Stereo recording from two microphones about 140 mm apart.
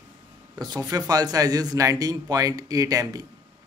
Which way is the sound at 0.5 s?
30° right (ahead or behind).